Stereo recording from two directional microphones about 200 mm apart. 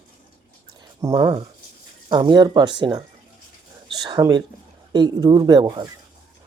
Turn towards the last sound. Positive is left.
turn(degrees=-20)  # may be behind; listen again after turning